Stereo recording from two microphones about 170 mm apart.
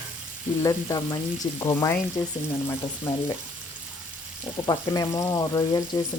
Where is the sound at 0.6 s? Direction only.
20° left (ahead or behind).